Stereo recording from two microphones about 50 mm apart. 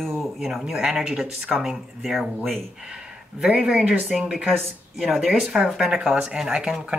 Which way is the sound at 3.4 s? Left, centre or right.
Centre.